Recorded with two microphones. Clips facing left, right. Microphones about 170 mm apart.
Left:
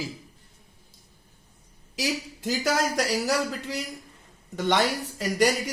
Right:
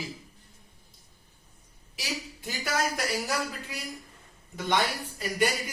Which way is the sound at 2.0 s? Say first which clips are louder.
Left 7 dB; 90° left.